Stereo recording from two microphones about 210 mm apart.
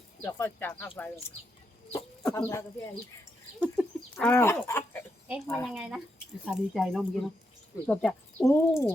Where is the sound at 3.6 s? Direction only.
5° right (ahead or behind).